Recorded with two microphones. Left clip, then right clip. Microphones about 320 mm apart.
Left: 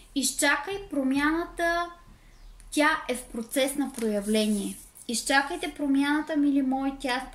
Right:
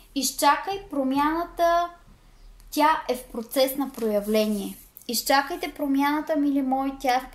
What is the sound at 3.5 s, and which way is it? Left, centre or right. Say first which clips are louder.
Speech: right 4 dB; centre.